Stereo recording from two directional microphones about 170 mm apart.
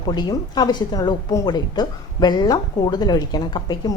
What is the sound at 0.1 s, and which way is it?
Speech, 25° left (ahead or behind).